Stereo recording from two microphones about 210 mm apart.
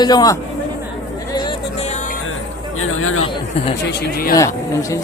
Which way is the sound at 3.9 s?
50° left (ahead or behind).